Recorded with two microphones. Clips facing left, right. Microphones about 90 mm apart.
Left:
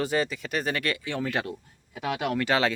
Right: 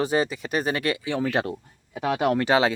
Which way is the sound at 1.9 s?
40° right (ahead or behind).